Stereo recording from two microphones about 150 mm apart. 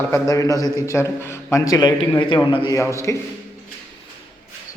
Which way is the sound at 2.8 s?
20° left (ahead or behind).